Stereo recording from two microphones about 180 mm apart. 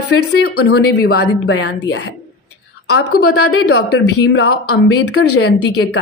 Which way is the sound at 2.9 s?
65° left (ahead or behind).